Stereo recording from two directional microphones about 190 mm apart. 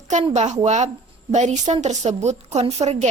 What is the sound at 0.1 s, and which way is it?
A woman's voice, 35° right (ahead or behind).